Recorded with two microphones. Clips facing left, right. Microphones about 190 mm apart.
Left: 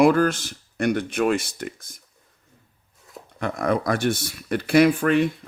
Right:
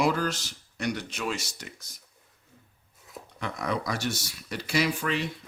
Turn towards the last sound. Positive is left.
turn(degrees=55)  # may be behind; listen again after turning